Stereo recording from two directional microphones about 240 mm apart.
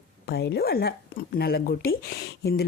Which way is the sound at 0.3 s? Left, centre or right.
Left.